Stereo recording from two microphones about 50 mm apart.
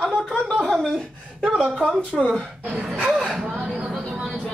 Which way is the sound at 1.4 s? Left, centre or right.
Right.